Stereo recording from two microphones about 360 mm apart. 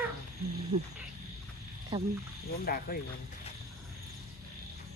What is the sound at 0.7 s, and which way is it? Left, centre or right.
Speech, centre.